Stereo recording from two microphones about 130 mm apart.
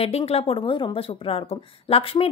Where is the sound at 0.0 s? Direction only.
50° left (ahead or behind).